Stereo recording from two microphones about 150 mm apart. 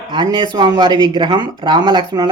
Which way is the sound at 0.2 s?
30° right (ahead or behind).